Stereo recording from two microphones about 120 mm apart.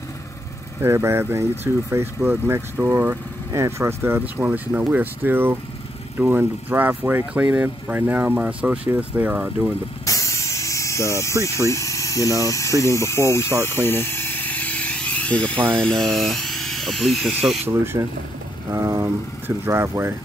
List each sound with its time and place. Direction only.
0.7 s speech: 20° right (ahead or behind)
10.0 s vehicle: 25° left (ahead or behind)
11.4 s speech: 25° left (ahead or behind); by 17.3 s centre (ahead or behind)
17.6 s speech: 20° right (ahead or behind)